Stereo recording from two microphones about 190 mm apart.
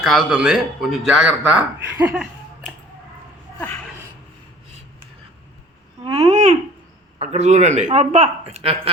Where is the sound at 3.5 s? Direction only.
10° left (ahead or behind).